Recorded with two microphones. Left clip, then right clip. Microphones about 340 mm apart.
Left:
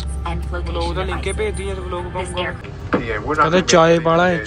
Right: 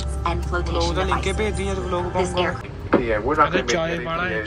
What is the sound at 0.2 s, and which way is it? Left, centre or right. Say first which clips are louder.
A man's voice: right 3 dB; centre.